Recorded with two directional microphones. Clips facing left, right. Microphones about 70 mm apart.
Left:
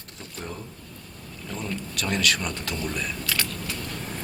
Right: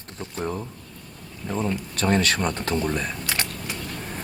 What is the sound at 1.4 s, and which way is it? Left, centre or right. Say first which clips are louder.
Speech: right 6 dB; right.